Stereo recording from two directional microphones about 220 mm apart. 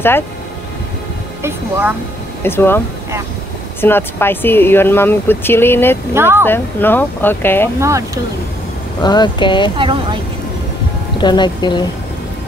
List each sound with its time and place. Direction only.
1.4 s speech: 10° right (ahead or behind)
2.4 s speech: 10° left (ahead or behind)
3.8 s speech: 10° left (ahead or behind)
6.1 s speech: 10° right (ahead or behind)
6.4 s speech: 10° left (ahead or behind)
7.8 s speech: 15° right (ahead or behind)
9.0 s speech: 20° left (ahead or behind)
11.1 s speech: 20° left (ahead or behind)